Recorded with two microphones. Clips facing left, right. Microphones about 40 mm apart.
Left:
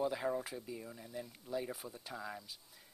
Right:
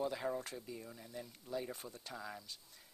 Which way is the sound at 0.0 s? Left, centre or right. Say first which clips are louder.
Left 3 dB; centre.